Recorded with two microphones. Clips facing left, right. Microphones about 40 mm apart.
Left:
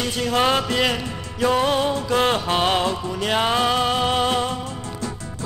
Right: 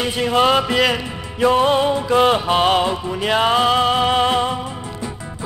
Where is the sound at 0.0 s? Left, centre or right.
Centre.